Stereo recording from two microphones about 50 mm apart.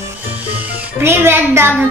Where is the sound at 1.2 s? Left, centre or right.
Right.